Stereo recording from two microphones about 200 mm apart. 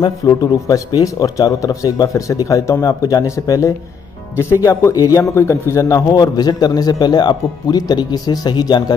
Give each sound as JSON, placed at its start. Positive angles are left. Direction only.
{"t": 0.0, "sound": "a man's voice", "side_deg": 20}